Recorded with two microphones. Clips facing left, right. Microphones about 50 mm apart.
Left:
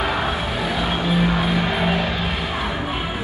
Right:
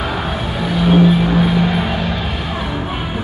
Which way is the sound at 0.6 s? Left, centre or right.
Centre.